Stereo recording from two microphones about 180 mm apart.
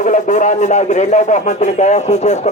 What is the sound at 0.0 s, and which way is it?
A man's voice, 45° left (ahead or behind).